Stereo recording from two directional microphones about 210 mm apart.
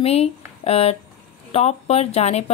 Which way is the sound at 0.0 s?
30° left (ahead or behind).